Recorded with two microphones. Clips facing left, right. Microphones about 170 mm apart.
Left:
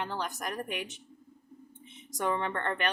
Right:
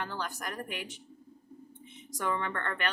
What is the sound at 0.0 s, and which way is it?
Speech, 20° left (ahead or behind).